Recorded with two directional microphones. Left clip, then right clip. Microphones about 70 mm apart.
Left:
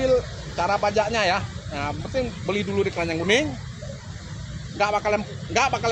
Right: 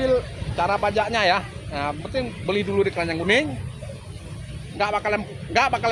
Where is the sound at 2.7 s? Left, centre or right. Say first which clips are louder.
Right 2 dB; centre.